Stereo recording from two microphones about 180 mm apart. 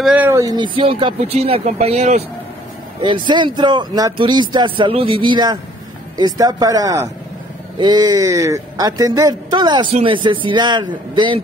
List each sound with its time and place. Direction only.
0.0 s speech: 10° right (ahead or behind); by 2.2 s 35° right (ahead or behind)
3.0 s speech: 25° right (ahead or behind)